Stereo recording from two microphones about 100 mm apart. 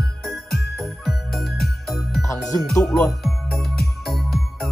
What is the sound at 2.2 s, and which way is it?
Music, 35° left (ahead or behind).